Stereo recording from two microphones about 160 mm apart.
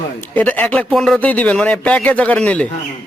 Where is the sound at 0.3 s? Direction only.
10° left (ahead or behind).